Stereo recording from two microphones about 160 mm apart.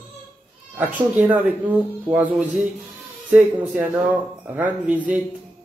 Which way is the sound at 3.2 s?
5° right (ahead or behind).